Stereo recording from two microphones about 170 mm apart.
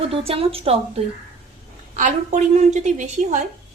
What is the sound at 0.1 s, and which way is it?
Speech, 35° right (ahead or behind).